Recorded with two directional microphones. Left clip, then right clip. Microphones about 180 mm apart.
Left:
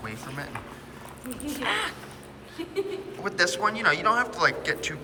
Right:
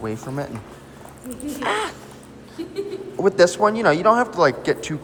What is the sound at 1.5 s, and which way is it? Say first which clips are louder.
Speech: right 4 dB; 45° right (ahead or behind).